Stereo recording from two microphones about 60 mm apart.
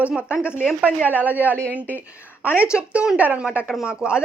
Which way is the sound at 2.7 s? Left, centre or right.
Centre.